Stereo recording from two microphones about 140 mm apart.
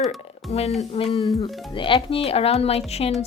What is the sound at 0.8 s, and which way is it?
Speech, 40° left (ahead or behind).